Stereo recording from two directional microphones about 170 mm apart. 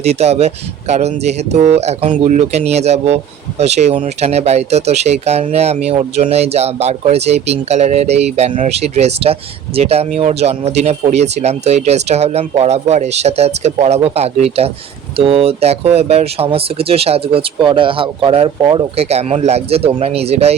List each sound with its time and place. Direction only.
0.0 s speech: 40° right (ahead or behind)